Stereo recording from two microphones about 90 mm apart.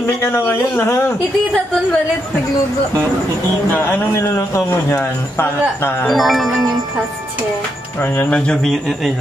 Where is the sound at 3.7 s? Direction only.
25° left (ahead or behind).